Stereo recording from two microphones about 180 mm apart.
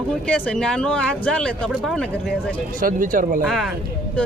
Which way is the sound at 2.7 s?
50° right (ahead or behind).